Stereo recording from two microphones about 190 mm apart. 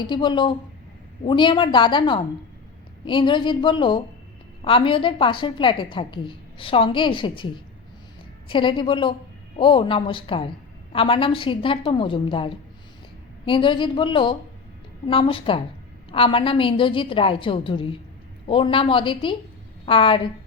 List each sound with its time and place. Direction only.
0.1 s a woman's voice: 25° left (ahead or behind)